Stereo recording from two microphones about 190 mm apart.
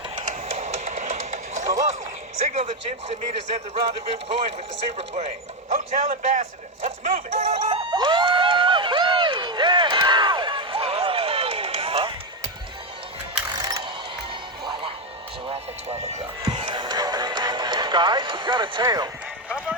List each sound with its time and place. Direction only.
0.2 s music: 40° right (ahead or behind)
2.5 s speech: 40° right (ahead or behind)
4.9 s speech: 35° right (ahead or behind)
7.0 s a sound: 30° right (ahead or behind)
13.5 s ratchet: 20° right (ahead or behind)
14.6 s music: 25° right (ahead or behind)
16.4 s music: 25° right (ahead or behind)
19.5 s clip-clop: 5° right (ahead or behind)